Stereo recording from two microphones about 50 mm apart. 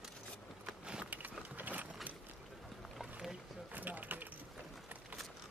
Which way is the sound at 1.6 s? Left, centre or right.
Right.